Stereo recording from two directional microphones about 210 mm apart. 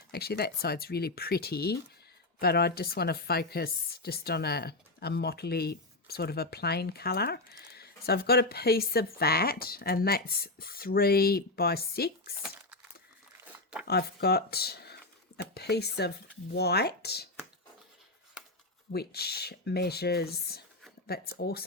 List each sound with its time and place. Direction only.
0.1 s a woman's voice: 50° left (ahead or behind)
13.8 s a woman's voice: 50° left (ahead or behind)
18.9 s a woman's voice: 50° left (ahead or behind)